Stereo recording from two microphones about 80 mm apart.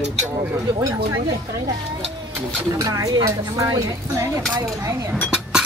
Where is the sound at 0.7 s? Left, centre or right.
Right.